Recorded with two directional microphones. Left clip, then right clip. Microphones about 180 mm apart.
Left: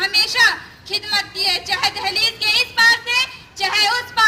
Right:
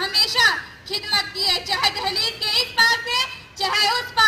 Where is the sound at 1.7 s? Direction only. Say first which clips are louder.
Left 1 dB; 15° left (ahead or behind).